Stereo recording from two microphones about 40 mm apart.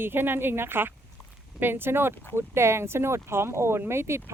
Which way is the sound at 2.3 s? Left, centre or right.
Right.